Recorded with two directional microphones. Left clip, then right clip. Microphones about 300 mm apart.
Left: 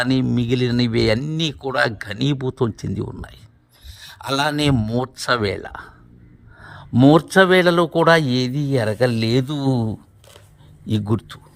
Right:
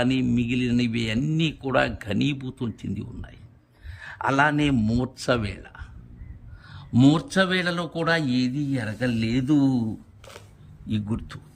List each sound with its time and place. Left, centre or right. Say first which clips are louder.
0.0 s a man's voice: left 4 dB; centre
4.4 s a man's voice: left 2 dB; centre
11.0 s speech: left 9 dB; centre